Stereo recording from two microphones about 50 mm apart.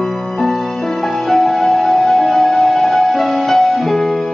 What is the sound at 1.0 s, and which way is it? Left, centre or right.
Music, centre.